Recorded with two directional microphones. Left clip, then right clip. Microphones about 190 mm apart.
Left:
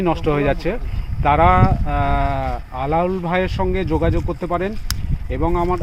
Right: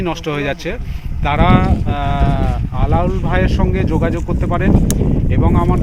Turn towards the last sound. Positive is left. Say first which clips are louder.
# right 2 dB
turn(degrees=10)  # may be behind; listen again after turning